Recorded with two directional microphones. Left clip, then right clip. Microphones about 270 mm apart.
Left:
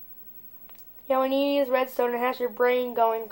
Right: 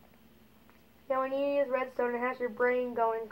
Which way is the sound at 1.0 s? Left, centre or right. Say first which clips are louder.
Left 7 dB; left.